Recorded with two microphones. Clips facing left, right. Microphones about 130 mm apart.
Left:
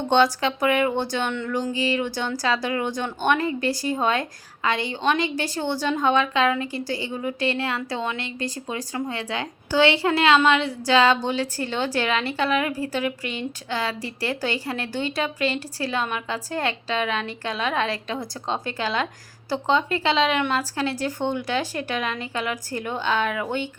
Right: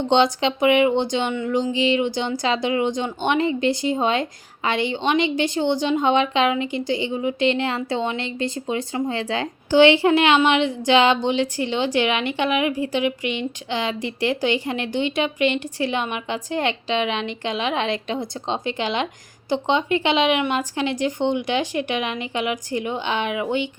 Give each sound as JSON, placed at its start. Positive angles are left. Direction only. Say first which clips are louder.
{"t": 0.1, "sound": "a woman's voice", "louder": "right 1 dB", "side_deg": -20}
{"t": 15.4, "sound": "a woman's voice", "louder": "right 6 dB", "side_deg": 35}
{"t": 15.8, "sound": "a woman's voice", "louder": "right 1 dB", "side_deg": -20}
{"t": 20.1, "sound": "a woman's voice", "louder": "right 1 dB", "side_deg": -20}